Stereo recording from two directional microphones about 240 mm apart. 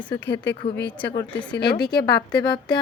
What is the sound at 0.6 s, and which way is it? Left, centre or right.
Speech, left.